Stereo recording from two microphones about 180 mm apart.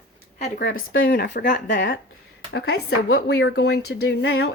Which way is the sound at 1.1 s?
55° left (ahead or behind).